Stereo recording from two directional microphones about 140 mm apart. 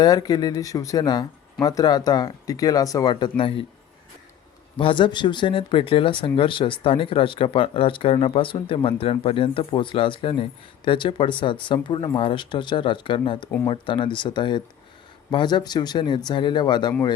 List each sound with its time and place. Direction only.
0.0 s speech: 30° left (ahead or behind)
4.8 s speech: 35° left (ahead or behind)